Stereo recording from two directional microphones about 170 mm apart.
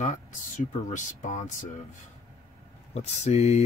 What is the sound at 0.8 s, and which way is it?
Speech, 45° left (ahead or behind).